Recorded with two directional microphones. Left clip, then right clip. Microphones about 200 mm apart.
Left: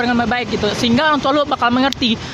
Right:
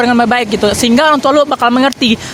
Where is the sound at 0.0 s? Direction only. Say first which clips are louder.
Right 7 dB; 45° right (ahead or behind).